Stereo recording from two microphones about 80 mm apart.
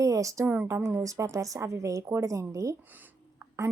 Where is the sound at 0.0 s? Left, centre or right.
Right.